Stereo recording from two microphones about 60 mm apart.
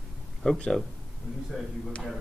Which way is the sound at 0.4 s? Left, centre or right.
Centre.